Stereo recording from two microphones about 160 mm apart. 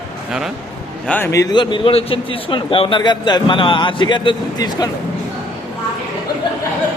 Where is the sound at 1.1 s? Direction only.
10° left (ahead or behind).